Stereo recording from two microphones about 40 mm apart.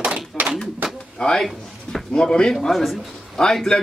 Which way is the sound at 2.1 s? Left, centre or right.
Left.